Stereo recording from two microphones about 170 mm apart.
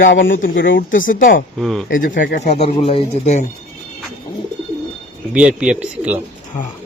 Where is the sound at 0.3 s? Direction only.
55° left (ahead or behind).